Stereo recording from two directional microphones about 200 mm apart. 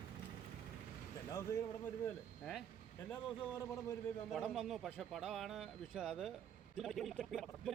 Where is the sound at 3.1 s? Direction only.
10° left (ahead or behind).